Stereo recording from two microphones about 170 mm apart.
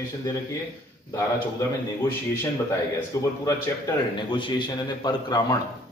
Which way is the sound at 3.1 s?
15° left (ahead or behind).